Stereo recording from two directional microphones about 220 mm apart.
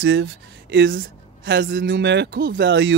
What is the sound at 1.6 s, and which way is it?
Speech, 45° right (ahead or behind).